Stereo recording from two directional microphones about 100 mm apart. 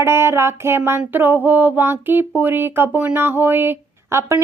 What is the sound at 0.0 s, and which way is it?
Speech, 25° right (ahead or behind).